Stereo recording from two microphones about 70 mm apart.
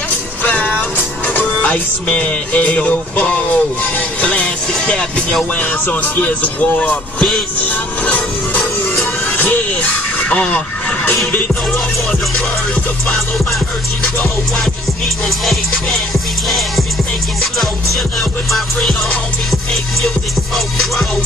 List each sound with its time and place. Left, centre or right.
0.4 s music: left
5.4 s speech: left
7.6 s music: left
15.2 s music: centre